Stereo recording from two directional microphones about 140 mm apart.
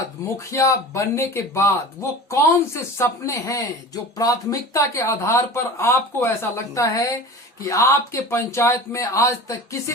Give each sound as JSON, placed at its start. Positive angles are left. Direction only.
{"t": 0.3, "sound": "speech", "side_deg": 20}